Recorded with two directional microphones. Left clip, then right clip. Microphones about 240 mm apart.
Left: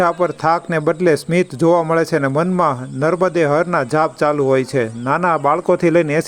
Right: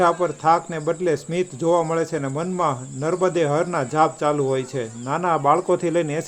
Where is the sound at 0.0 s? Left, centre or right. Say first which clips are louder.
Left 3 dB; left.